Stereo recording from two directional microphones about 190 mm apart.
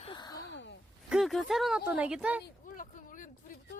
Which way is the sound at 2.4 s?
45° left (ahead or behind).